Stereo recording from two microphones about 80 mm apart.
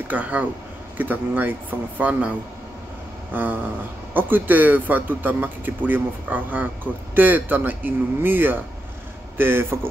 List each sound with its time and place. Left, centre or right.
0.1 s speech: centre
3.3 s speech: right